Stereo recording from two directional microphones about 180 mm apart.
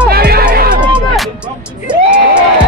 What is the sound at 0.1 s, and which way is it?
Music, 60° right (ahead or behind).